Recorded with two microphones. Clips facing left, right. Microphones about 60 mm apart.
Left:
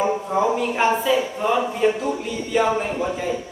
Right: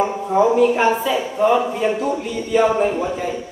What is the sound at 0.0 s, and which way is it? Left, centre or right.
A man's voice, centre.